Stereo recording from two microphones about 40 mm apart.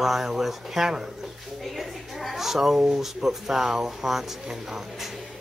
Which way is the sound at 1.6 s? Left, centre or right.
Centre.